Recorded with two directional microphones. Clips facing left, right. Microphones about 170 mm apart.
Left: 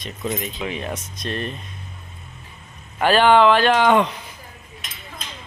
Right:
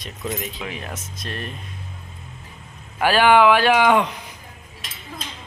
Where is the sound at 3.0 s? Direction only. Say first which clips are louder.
Left 1 dB; 10° right (ahead or behind).